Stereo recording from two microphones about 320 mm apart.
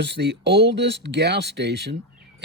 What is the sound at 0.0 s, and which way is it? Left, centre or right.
Speech, right.